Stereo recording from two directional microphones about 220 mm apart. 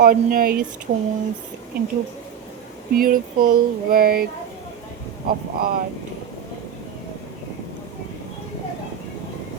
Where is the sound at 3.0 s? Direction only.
40° right (ahead or behind).